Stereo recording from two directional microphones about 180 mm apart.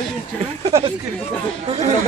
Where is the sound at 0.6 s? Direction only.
30° right (ahead or behind).